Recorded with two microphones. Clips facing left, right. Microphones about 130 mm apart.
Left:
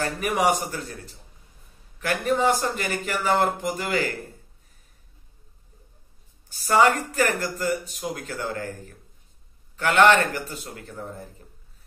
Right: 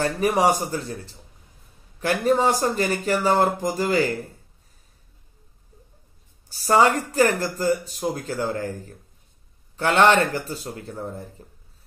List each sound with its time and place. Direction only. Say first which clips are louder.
0.0 s speech: right 3 dB; 35° right (ahead or behind)
6.5 s speech: right 1 dB; 35° right (ahead or behind)